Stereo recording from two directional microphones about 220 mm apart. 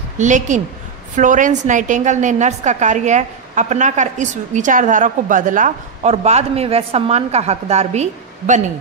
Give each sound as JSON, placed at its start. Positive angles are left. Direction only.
{"t": 0.2, "sound": "a woman's voice", "side_deg": -35}